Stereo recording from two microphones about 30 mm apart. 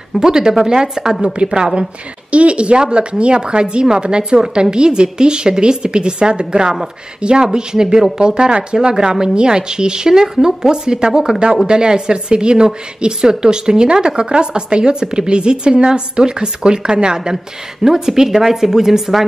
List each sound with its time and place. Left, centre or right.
0.2 s a woman's voice: right
2.3 s a woman's voice: right
7.4 s a woman's voice: right
17.8 s speech: centre